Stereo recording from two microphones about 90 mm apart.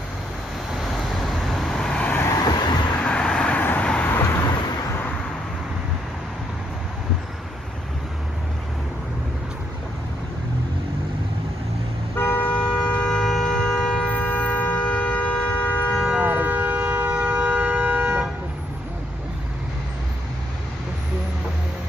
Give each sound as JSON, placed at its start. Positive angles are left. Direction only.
{"t": 1.2, "sound": "vehicle", "side_deg": 0}
{"t": 2.2, "sound": "vehicle", "side_deg": 40}
{"t": 3.0, "sound": "vehicle", "side_deg": 10}
{"t": 12.2, "sound": "a sound", "side_deg": 20}
{"t": 16.2, "sound": "shofar", "side_deg": -20}